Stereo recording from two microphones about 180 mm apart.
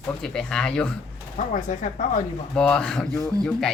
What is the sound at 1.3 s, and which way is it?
Speech, 45° left (ahead or behind).